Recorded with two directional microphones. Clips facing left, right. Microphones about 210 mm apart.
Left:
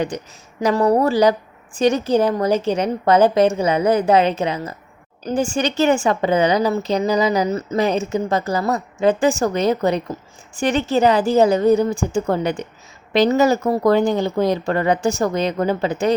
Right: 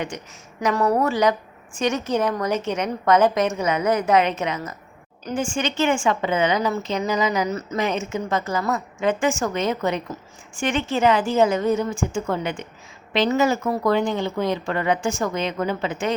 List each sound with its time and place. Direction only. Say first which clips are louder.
0.1 s a woman's voice: left 6 dB; 35° left (ahead or behind)